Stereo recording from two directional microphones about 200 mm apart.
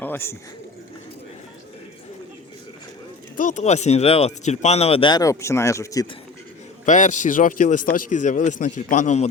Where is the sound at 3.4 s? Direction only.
40° left (ahead or behind); by 6.0 s 15° left (ahead or behind).